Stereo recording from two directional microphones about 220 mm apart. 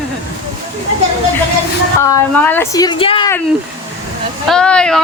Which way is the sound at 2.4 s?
10° left (ahead or behind).